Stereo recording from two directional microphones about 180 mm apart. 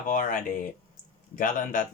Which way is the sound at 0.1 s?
50° left (ahead or behind).